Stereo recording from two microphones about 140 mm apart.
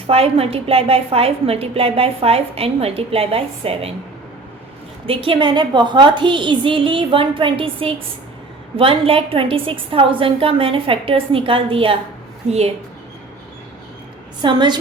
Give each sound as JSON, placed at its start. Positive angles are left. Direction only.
{"t": 0.1, "sound": "a woman's voice", "side_deg": -45}
{"t": 5.0, "sound": "a woman's voice", "side_deg": -40}
{"t": 14.4, "sound": "a woman's voice", "side_deg": -30}